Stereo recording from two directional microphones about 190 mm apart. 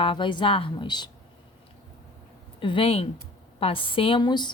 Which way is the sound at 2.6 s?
30° left (ahead or behind).